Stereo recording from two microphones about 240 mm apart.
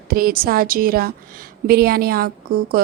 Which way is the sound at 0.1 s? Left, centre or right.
Right.